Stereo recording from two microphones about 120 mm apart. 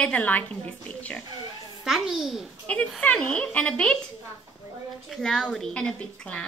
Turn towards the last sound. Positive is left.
turn(degrees=10)  # may be behind; listen again after turning